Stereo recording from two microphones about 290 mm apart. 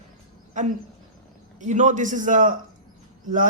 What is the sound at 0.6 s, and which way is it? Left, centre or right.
Speech, right.